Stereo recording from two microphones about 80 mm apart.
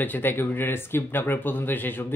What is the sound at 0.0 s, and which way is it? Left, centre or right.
Speech, left.